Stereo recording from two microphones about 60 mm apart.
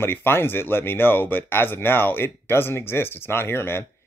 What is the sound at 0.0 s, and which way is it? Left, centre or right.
Speech, left.